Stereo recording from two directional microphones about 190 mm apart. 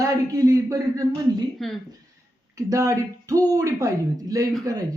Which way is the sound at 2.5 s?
15° right (ahead or behind).